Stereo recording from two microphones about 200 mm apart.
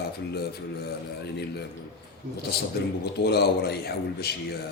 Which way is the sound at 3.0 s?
55° left (ahead or behind).